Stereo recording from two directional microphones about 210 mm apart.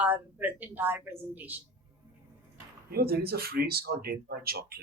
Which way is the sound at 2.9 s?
45° right (ahead or behind).